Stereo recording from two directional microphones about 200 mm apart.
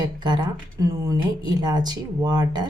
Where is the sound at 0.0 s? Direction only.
20° right (ahead or behind).